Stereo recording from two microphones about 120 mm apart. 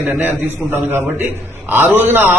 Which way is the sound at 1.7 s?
15° right (ahead or behind).